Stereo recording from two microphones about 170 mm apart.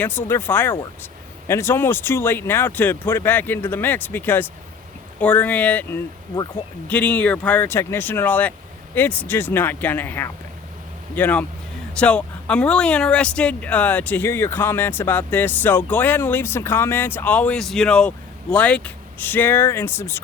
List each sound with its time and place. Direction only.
0.0 s speech: 10° left (ahead or behind)